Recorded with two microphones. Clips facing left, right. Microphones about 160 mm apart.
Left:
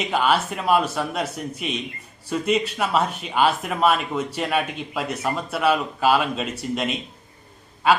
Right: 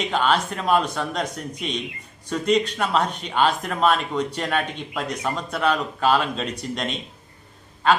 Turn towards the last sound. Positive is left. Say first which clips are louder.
# even
turn(degrees=5)  # may be behind; listen again after turning